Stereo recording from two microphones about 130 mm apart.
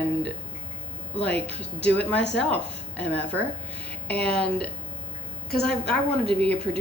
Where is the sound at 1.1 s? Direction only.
50° right (ahead or behind).